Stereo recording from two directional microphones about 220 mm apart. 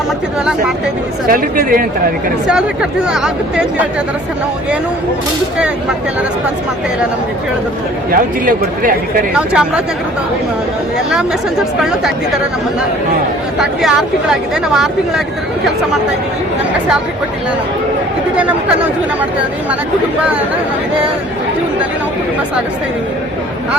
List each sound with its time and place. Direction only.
1.3 s speech: 40° right (ahead or behind)
3.1 s speech: centre (ahead or behind)
8.1 s speech: 40° right (ahead or behind)
9.3 s speech: 5° right (ahead or behind)
11.8 s speech: 5° right (ahead or behind)
13.6 s speech: centre (ahead or behind)
18.3 s speech: 5° right (ahead or behind)